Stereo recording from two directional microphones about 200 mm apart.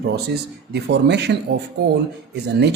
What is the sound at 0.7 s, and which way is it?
Speech, 55° right (ahead or behind).